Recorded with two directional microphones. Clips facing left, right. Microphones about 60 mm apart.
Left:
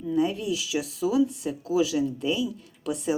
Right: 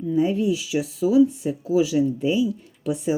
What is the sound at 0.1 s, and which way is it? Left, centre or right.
Speech, centre.